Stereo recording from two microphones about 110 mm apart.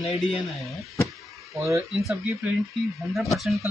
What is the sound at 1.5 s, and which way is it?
Speech, 25° right (ahead or behind).